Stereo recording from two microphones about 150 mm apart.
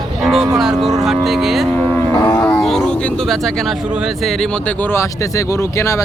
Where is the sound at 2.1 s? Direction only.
20° left (ahead or behind).